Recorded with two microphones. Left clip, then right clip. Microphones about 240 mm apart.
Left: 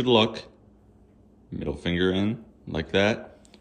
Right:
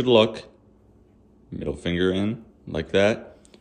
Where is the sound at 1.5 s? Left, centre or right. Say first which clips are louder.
Right 1 dB; centre.